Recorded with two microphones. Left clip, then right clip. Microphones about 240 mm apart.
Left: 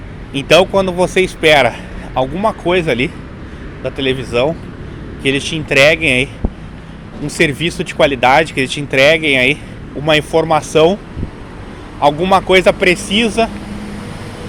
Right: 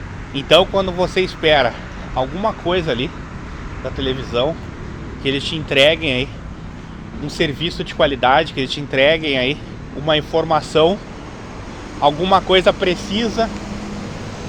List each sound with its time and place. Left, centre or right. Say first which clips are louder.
0.3 s speech: left 3 dB; left
4.3 s speech: left 4 dB; left
7.3 s speech: left 6 dB; left
11.9 s speech: left 3 dB; centre